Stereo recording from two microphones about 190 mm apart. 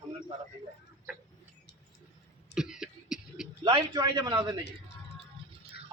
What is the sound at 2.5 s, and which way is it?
Cough, 5° right (ahead or behind).